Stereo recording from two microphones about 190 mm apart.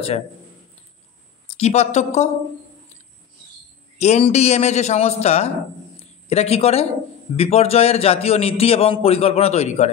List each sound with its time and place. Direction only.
1.5 s a man's voice: 35° left (ahead or behind)
4.0 s a man's voice: 35° left (ahead or behind)